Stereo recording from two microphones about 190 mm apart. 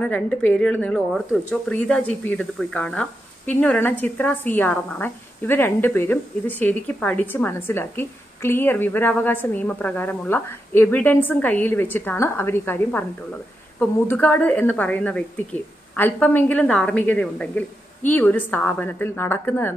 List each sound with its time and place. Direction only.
0.0 s speech: 5° left (ahead or behind)